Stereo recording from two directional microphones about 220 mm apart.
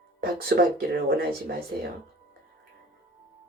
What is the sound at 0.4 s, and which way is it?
Speech, 45° right (ahead or behind).